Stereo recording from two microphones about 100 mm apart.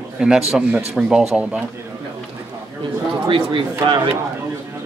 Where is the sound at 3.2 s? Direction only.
55° right (ahead or behind).